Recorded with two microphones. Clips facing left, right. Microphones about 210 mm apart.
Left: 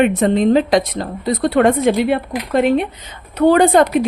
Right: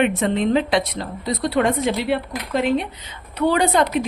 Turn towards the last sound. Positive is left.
turn(degrees=50)  # may be behind; listen again after turning